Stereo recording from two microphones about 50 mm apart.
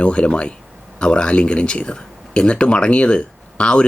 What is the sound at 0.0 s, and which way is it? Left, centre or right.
Speech, centre.